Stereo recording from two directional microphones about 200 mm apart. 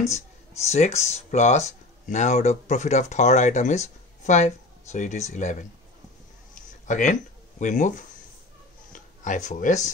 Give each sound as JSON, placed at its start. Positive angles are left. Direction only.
{"t": 0.6, "sound": "speech", "side_deg": 35}
{"t": 6.9, "sound": "speech", "side_deg": 40}
{"t": 8.9, "sound": "speech", "side_deg": 40}